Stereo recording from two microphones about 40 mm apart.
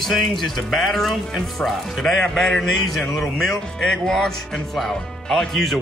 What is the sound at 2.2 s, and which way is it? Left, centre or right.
Speech, centre.